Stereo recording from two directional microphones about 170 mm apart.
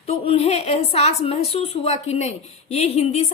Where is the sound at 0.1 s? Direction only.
35° left (ahead or behind).